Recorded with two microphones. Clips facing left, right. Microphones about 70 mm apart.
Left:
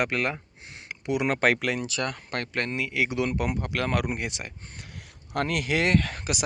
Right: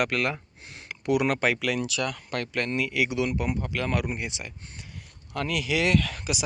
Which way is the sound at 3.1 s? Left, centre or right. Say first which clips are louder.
Even; left.